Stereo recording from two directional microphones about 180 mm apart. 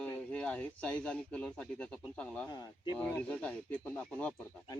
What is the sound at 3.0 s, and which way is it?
Speech, 10° left (ahead or behind).